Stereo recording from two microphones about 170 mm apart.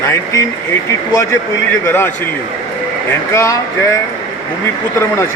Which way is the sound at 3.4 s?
20° left (ahead or behind).